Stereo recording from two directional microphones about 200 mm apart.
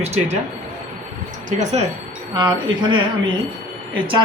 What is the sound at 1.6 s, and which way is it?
Speech, 35° right (ahead or behind).